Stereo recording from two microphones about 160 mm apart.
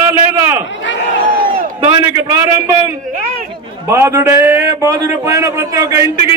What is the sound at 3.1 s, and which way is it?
Speech, 60° right (ahead or behind).